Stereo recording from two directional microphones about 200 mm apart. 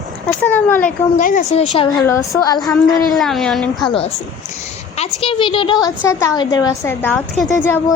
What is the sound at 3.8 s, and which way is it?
A woman's voice, 25° left (ahead or behind).